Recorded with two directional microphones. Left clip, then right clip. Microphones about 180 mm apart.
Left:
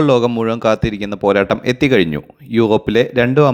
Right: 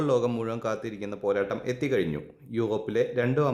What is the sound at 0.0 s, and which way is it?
A man's voice, 35° left (ahead or behind).